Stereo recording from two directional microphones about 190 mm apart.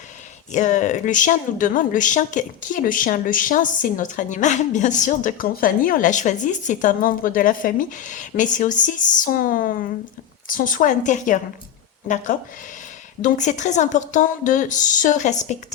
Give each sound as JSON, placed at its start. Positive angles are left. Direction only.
{"t": 0.5, "sound": "a woman's voice", "side_deg": 40}